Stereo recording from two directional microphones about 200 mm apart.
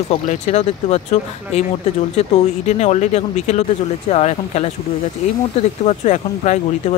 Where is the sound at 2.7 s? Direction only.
35° left (ahead or behind).